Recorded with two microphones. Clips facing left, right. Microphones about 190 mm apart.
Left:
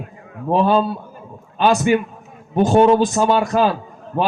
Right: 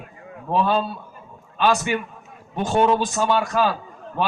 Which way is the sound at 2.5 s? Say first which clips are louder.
Left 6 dB; 45° left (ahead or behind).